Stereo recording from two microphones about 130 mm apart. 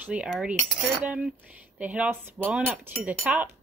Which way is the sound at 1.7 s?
10° right (ahead or behind).